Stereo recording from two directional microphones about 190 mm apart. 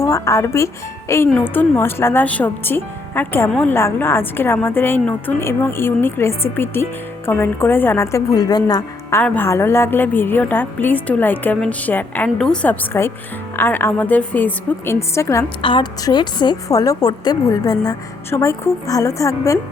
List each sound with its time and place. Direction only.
0.0 s a woman's voice: 15° left (ahead or behind)